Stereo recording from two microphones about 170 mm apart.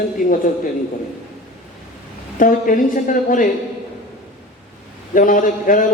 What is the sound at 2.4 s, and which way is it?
A man's voice, 50° left (ahead or behind).